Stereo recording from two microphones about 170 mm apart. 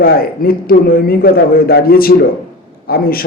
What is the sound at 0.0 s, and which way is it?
Speech, 60° left (ahead or behind).